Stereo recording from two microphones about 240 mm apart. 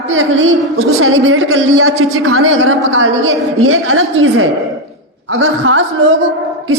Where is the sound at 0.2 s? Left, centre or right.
Right.